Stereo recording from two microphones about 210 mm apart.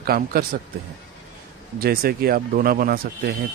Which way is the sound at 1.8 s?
45° right (ahead or behind).